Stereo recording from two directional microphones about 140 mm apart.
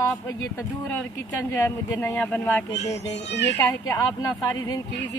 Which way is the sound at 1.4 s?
20° left (ahead or behind).